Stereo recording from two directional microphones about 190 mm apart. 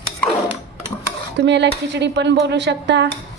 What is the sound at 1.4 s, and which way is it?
A woman's voice, 65° right (ahead or behind).